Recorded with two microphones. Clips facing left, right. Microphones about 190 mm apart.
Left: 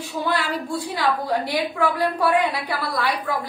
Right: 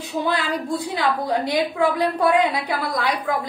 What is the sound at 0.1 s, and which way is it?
A woman's voice, 20° right (ahead or behind).